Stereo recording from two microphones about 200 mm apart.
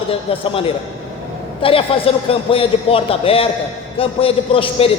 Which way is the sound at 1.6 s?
25° left (ahead or behind).